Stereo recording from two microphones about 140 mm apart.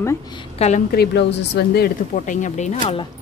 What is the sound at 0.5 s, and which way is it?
Speech, 50° left (ahead or behind).